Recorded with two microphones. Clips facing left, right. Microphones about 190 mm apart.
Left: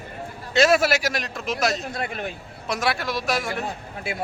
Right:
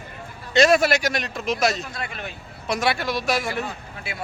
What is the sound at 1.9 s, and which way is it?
Speech, 55° left (ahead or behind).